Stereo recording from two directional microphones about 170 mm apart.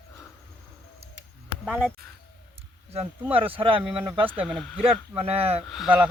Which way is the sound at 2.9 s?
10° right (ahead or behind).